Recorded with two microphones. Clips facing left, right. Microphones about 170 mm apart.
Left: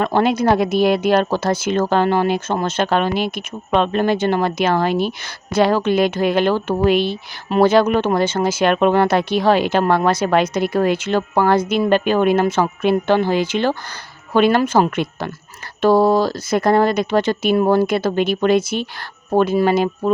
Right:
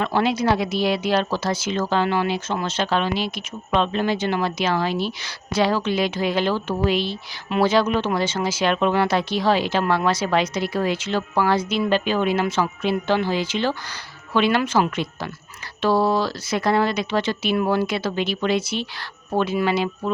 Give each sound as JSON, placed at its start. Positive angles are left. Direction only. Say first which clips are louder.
{"t": 0.0, "sound": "speech", "louder": "left 4 dB", "side_deg": 50}